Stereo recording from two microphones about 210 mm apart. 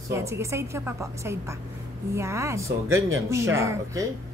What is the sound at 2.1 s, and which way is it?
Speech, 15° right (ahead or behind).